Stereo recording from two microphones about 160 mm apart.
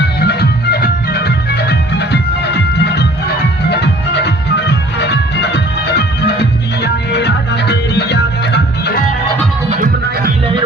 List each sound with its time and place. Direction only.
0.2 s music: 90° left